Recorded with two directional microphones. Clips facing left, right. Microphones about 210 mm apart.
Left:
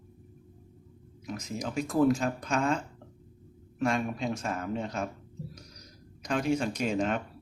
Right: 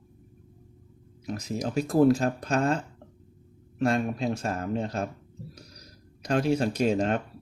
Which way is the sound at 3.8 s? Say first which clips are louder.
Right 4 dB; 35° right (ahead or behind).